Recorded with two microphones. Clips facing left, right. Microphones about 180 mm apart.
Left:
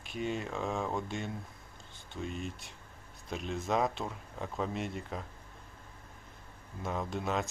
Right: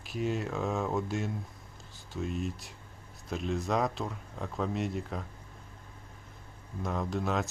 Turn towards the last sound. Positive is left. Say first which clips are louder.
# right 2 dB
turn(degrees=0)  # may be behind; listen again after turning